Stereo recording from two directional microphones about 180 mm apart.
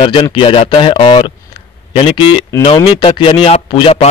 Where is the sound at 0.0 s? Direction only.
30° left (ahead or behind).